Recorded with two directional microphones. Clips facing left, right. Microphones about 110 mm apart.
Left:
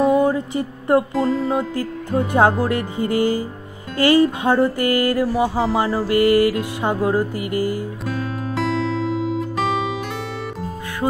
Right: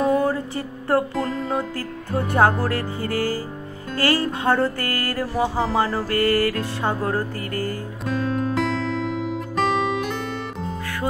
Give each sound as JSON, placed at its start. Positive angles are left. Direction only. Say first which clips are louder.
{"t": 0.2, "sound": "a sound", "louder": "left 4 dB", "side_deg": 20}
{"t": 1.1, "sound": "music", "louder": "left 5 dB", "side_deg": 5}
{"t": 2.3, "sound": "speech", "louder": "left 2 dB", "side_deg": 20}
{"t": 3.9, "sound": "music", "louder": "left 7 dB", "side_deg": 15}